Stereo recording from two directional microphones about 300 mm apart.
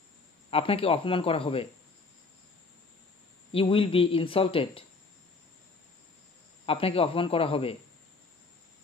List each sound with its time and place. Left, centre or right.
0.5 s speech: centre
3.5 s speech: centre
6.6 s a man's voice: centre